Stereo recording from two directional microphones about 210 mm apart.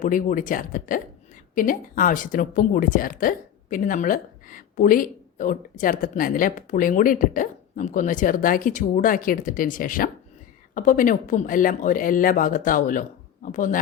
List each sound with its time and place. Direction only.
0.0 s speech: 40° left (ahead or behind)